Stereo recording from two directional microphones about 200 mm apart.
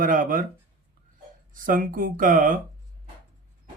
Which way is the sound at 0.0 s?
45° right (ahead or behind).